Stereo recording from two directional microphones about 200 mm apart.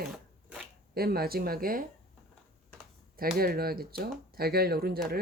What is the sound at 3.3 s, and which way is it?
Speech, 50° right (ahead or behind).